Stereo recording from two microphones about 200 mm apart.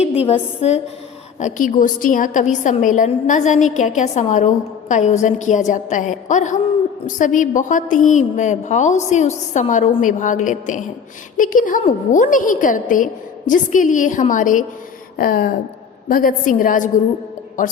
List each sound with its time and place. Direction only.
0.0 s a woman's voice: 30° left (ahead or behind)
15.1 s a sound: 50° left (ahead or behind)
16.0 s a woman's voice: 45° left (ahead or behind)